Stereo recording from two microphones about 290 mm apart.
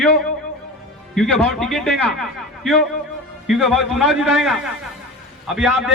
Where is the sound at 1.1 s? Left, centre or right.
Centre.